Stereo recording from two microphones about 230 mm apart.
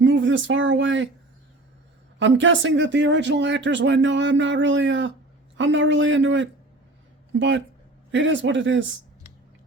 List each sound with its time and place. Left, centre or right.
0.0 s speech: right
2.1 s speech: right